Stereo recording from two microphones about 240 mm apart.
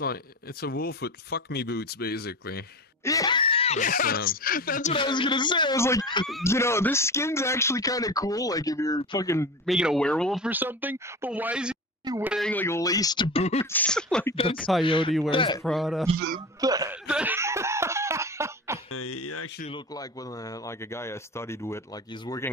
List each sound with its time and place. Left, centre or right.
0.0 s speech: left
3.0 s speech: centre; by 4.9 s left
4.9 s speech: centre
9.7 s speech: centre
12.0 s speech: centre
12.3 s speech: centre; by 13.7 s left
13.7 s speech: centre
14.3 s speech: left
15.6 s speech: centre
16.2 s speech: right
16.6 s speech: centre
17.1 s cough: centre
18.9 s speech: left
19.7 s speech: centre